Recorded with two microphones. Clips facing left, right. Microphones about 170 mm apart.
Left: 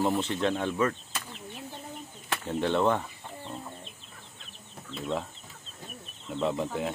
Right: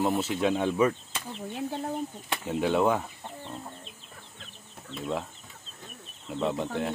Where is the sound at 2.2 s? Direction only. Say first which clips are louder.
Left 1 dB; 10° right (ahead or behind).